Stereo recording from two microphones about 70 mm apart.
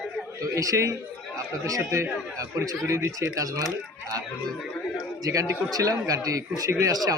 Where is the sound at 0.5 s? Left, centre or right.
Right.